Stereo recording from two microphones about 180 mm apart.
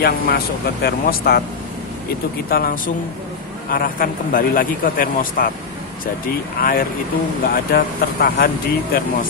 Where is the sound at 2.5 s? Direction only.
50° left (ahead or behind).